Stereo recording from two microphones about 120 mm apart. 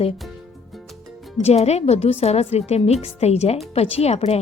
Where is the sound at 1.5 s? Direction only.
65° left (ahead or behind).